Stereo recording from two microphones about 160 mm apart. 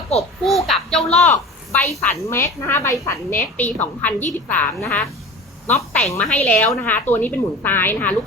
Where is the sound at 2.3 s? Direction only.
15° left (ahead or behind).